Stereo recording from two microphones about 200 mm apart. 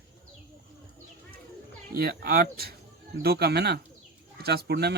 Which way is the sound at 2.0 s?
50° right (ahead or behind).